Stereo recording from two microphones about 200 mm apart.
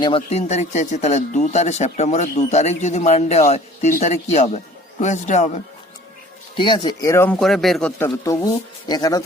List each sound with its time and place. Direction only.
0.0 s speech: 30° left (ahead or behind)
6.6 s speech: 25° left (ahead or behind)